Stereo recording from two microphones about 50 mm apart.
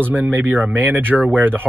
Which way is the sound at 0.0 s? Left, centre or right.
Right.